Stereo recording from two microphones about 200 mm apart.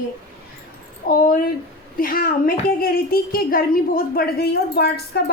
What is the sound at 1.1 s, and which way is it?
A woman's voice, 45° left (ahead or behind).